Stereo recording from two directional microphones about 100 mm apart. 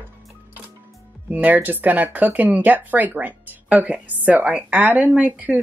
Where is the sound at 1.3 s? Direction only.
15° right (ahead or behind).